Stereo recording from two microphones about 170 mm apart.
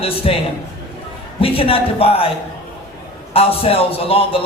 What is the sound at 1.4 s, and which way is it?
Speech, 35° left (ahead or behind).